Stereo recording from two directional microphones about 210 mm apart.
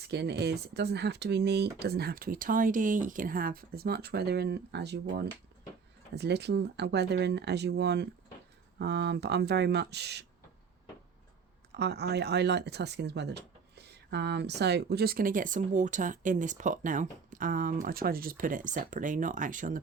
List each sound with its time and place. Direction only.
0.0 s speech: 50° right (ahead or behind)
11.8 s speech: 50° right (ahead or behind)